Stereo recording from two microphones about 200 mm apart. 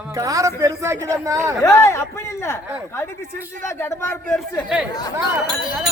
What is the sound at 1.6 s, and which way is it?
Speech, 15° left (ahead or behind).